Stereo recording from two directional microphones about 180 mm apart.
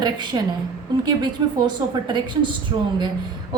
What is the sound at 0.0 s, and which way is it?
A woman's voice, 25° right (ahead or behind).